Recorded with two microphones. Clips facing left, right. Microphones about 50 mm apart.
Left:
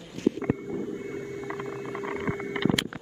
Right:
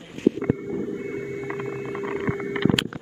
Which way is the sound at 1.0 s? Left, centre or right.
Right.